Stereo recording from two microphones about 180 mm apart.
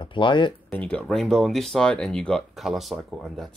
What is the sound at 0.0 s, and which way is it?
Speech, 25° left (ahead or behind).